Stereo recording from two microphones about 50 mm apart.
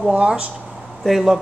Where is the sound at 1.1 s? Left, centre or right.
Centre.